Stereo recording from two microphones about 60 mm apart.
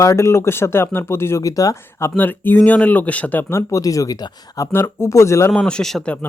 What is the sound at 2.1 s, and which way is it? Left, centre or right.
Speech, left.